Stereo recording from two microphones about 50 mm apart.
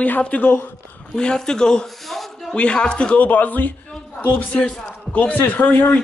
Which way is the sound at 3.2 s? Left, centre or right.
Left.